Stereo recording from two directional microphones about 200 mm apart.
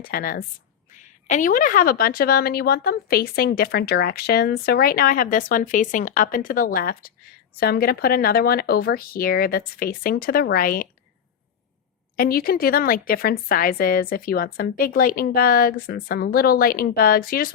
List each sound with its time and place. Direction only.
0.1 s a woman's voice: 45° left (ahead or behind)
12.1 s a woman's voice: 50° left (ahead or behind)